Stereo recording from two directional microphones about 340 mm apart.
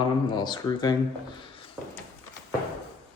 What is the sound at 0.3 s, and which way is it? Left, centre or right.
Speech, centre.